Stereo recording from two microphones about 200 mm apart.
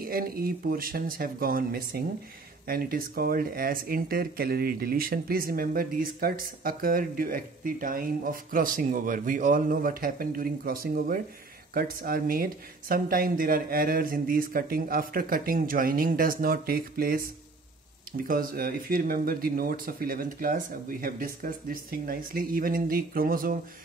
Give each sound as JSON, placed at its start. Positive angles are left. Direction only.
{"t": 0.0, "sound": "speech", "side_deg": -45}